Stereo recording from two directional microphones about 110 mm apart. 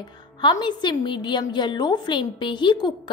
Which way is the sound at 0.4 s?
45° left (ahead or behind).